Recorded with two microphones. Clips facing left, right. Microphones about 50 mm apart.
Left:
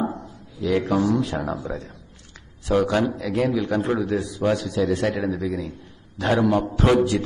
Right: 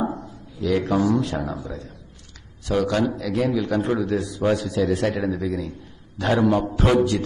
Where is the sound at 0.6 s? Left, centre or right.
Centre.